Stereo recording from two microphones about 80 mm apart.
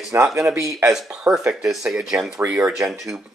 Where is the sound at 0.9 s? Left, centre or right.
Centre.